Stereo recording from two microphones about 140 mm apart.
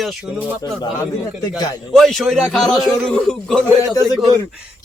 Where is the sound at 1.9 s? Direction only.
Centre (ahead or behind).